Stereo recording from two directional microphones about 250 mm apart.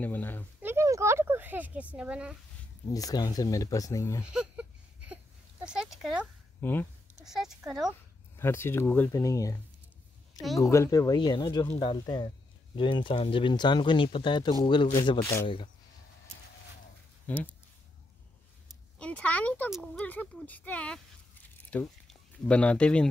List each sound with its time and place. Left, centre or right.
0.0 s a sound: centre
0.6 s a sound: centre
2.9 s speech: centre
4.2 s a sound: centre
7.2 s speech: centre
8.4 s speech: centre
10.6 s speech: centre
17.3 s speech: centre
18.9 s speech: centre